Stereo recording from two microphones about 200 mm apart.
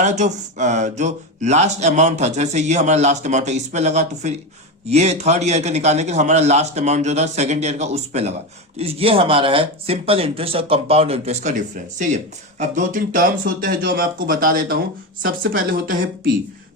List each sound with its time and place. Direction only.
0.0 s speech: 35° right (ahead or behind)